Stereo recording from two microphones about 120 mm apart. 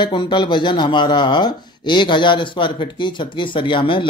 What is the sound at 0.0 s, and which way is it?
Speech, 40° left (ahead or behind).